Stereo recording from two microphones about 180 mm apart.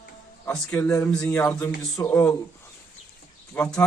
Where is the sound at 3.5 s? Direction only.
10° left (ahead or behind).